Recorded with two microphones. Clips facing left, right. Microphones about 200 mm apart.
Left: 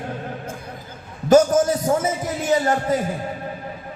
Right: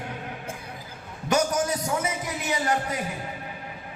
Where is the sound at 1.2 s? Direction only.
50° left (ahead or behind).